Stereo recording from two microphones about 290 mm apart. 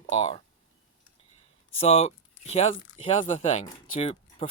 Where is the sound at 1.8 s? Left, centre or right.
Left.